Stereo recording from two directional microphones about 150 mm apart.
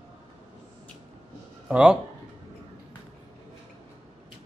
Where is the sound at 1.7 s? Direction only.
5° right (ahead or behind).